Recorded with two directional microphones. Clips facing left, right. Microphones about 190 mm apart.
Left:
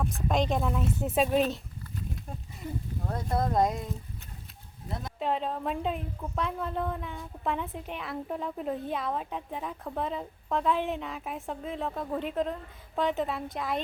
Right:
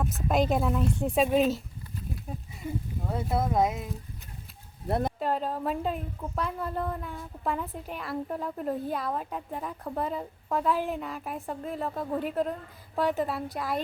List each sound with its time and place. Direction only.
0.0 s a woman's voice: 5° right (ahead or behind)
4.9 s speech: 65° right (ahead or behind)
5.2 s a woman's voice: 5° right (ahead or behind)